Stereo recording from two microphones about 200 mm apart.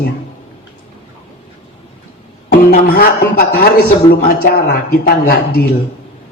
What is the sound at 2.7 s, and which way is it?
A man's voice, 50° left (ahead or behind).